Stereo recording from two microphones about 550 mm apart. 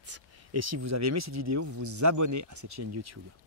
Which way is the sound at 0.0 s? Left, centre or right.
Right.